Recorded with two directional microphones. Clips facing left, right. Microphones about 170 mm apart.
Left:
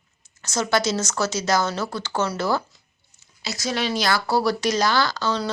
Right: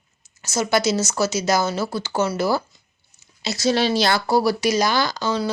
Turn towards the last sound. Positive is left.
turn(degrees=-15)  # may be behind; listen again after turning